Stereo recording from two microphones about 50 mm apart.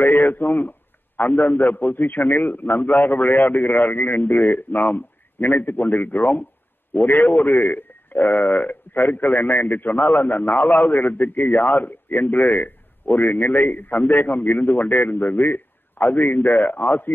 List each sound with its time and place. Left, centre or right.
0.0 s a man's voice: left